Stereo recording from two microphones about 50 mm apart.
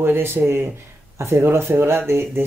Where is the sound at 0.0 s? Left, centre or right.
Right.